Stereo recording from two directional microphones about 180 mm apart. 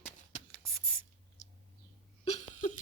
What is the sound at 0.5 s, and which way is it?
Writing, centre (ahead or behind).